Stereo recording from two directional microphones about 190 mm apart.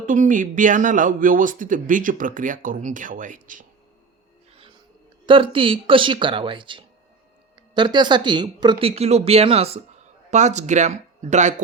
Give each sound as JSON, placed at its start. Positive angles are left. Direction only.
{"t": 0.0, "sound": "speech", "side_deg": -45}
{"t": 5.2, "sound": "speech", "side_deg": -25}